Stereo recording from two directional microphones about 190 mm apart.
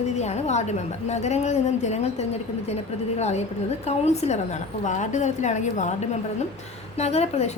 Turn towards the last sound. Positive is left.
turn(degrees=35)  # may be behind; listen again after turning